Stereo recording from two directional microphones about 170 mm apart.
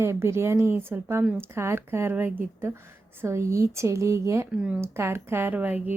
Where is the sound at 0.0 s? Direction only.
15° right (ahead or behind).